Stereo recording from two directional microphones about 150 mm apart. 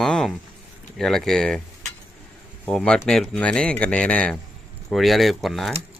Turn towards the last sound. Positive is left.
turn(degrees=0)  # may be behind; listen again after turning